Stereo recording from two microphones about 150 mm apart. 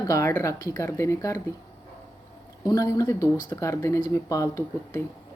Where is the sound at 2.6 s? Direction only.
25° left (ahead or behind).